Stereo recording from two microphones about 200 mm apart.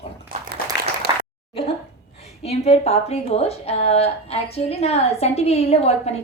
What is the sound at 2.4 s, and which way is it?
A woman's voice, 30° left (ahead or behind).